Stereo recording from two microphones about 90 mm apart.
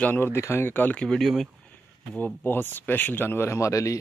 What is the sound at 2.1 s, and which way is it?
Speech, 20° left (ahead or behind).